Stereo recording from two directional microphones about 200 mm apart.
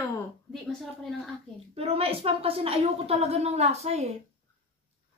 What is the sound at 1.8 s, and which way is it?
Speech, 30° right (ahead or behind).